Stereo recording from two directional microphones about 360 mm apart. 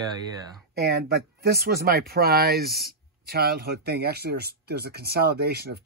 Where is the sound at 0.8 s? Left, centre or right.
Right.